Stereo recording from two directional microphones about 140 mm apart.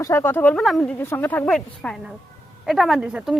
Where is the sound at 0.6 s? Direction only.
Centre (ahead or behind).